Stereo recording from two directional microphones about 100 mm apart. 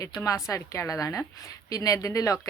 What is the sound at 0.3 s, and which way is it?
Speech, 35° left (ahead or behind).